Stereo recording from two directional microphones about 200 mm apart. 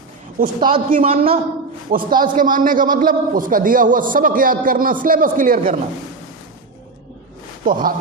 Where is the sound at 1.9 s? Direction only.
45° right (ahead or behind).